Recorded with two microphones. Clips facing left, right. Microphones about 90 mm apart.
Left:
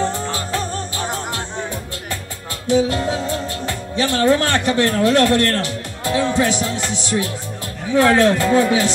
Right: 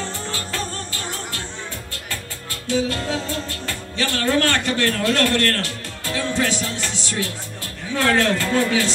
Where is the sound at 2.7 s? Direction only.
20° left (ahead or behind).